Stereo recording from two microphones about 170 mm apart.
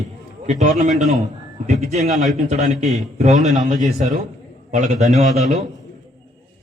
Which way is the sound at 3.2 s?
40° right (ahead or behind).